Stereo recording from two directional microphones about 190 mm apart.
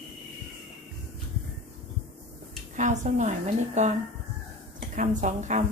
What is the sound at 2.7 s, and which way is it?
A woman's voice, 40° right (ahead or behind).